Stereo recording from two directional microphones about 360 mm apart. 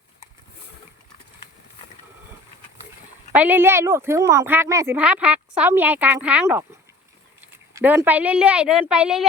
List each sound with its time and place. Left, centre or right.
3.3 s speech: centre